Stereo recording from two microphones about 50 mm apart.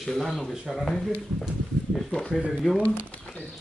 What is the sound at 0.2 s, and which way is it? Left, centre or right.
Speech, centre.